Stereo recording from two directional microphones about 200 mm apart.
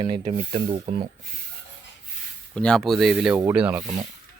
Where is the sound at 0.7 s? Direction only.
25° right (ahead or behind).